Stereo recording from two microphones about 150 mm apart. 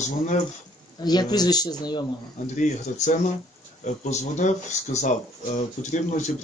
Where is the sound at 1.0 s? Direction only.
25° left (ahead or behind).